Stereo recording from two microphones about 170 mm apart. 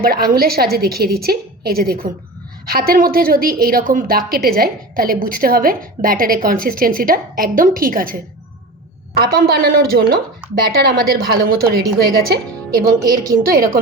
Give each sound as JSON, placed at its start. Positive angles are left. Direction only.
{"t": 0.0, "sound": "a woman's voice", "side_deg": -60}